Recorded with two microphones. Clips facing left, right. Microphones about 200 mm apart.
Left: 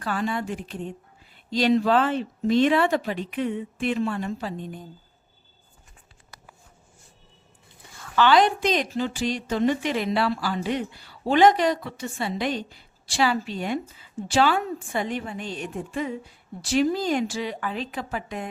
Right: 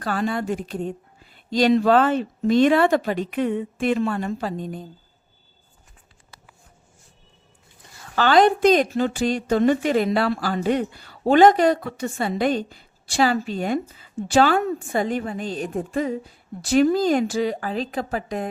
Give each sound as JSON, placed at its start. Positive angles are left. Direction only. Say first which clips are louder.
{"t": 0.3, "sound": "a woman's voice", "louder": "right 4 dB", "side_deg": -40}
{"t": 8.1, "sound": "a woman's voice", "louder": "right 3 dB", "side_deg": -40}